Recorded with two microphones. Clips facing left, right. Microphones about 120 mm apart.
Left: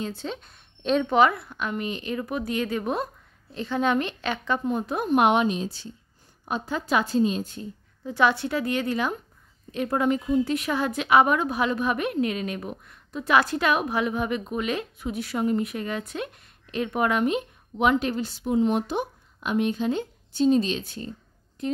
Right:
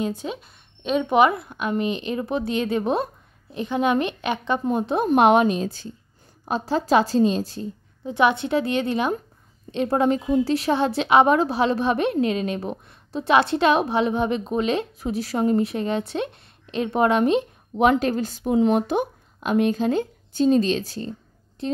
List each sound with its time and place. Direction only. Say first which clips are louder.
0.0 s speech: right 5 dB; 15° right (ahead or behind)
1.0 s a woman's voice: right 4 dB; 20° right (ahead or behind); by 5.9 s 45° right (ahead or behind)
6.4 s a woman's voice: right 5 dB; 35° right (ahead or behind)
8.0 s a woman's voice: right 2 dB; 20° right (ahead or behind); by 18.5 s 45° right (ahead or behind)
18.5 s speech: right 4 dB; 70° right (ahead or behind)
18.8 s a woman's voice: right 5 dB; 50° right (ahead or behind)